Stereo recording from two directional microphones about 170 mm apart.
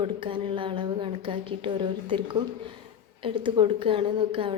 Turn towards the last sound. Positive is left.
turn(degrees=-30)  # may be behind; listen again after turning